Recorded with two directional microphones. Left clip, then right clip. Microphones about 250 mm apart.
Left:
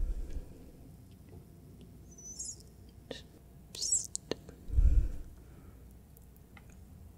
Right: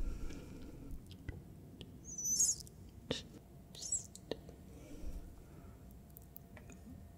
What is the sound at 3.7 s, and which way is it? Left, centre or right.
Whispering, left.